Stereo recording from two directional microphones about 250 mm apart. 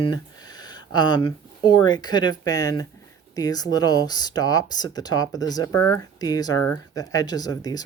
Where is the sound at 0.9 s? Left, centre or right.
Centre.